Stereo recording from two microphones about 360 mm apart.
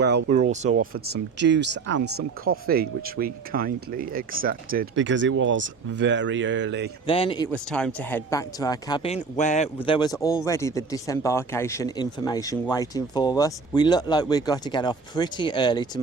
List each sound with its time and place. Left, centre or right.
0.7 s speech: right
7.1 s speech: centre